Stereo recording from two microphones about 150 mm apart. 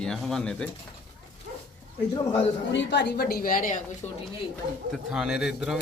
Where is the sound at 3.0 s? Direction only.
90° left; by 4.1 s 55° left (ahead or behind).